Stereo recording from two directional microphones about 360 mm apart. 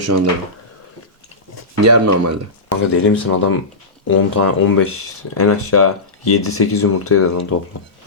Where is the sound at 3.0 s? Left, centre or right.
Left.